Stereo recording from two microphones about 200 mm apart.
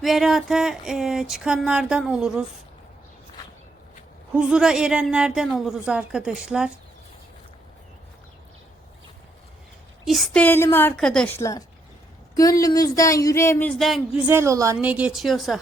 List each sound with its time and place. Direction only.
0.0 s speech: centre (ahead or behind)
4.4 s speech: 5° right (ahead or behind)
10.1 s speech: centre (ahead or behind)
11.3 s a woman's voice: 15° left (ahead or behind); by 15.5 s centre (ahead or behind)